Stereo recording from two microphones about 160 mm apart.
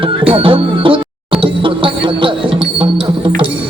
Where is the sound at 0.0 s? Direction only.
35° right (ahead or behind).